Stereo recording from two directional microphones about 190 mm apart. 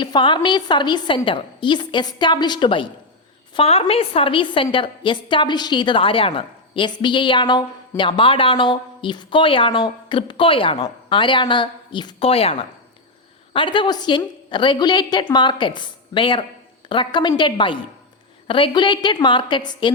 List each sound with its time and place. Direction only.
0.0 s a woman's voice: 25° left (ahead or behind)